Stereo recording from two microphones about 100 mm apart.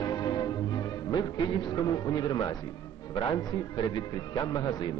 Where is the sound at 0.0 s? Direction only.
45° left (ahead or behind).